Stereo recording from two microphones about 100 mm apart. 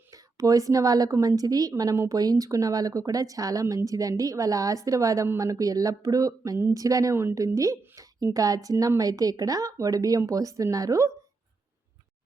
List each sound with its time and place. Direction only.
0.1 s a woman's voice: 35° right (ahead or behind)